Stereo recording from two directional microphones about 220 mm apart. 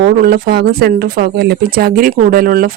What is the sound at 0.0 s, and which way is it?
Speech, 45° right (ahead or behind).